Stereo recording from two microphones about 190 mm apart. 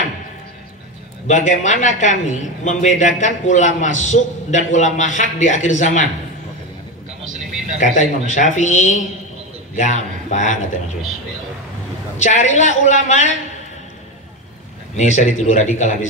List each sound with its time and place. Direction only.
1.2 s speech: 40° left (ahead or behind)
7.8 s speech: 40° left (ahead or behind)
12.2 s speech: 40° left (ahead or behind)
15.0 s speech: 40° left (ahead or behind)